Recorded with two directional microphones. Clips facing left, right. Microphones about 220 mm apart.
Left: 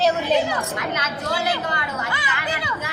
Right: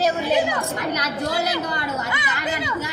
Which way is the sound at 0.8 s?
40° right (ahead or behind).